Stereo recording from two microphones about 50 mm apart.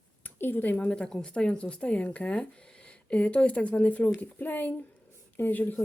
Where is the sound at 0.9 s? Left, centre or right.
Centre.